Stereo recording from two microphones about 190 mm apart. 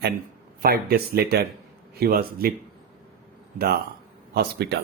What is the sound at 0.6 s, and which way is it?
Speech, 55° right (ahead or behind).